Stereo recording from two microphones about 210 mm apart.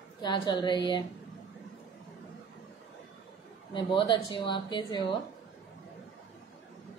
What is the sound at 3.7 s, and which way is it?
A woman's voice, 20° left (ahead or behind).